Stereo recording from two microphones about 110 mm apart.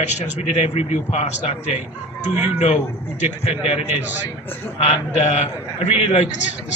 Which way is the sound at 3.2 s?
70° left (ahead or behind).